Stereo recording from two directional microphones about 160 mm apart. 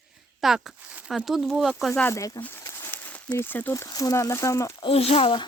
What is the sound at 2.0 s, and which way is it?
Speech, 20° left (ahead or behind).